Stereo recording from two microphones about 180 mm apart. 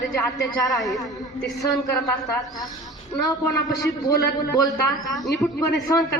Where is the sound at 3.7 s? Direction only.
20° left (ahead or behind).